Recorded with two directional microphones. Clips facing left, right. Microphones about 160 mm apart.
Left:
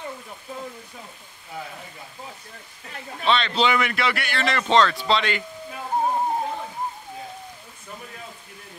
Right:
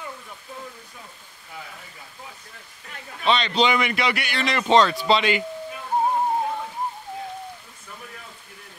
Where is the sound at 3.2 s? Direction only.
Centre (ahead or behind).